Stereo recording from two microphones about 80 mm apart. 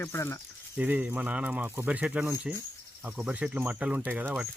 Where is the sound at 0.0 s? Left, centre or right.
Left.